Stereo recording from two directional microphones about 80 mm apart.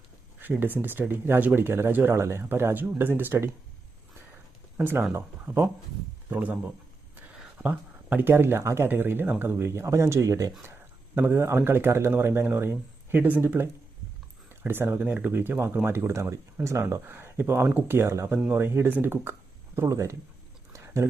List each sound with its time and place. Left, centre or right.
0.6 s speech: right
4.8 s speech: right
7.6 s speech: right
10.6 s speech: right
18.3 s speech: right
20.7 s a sound: right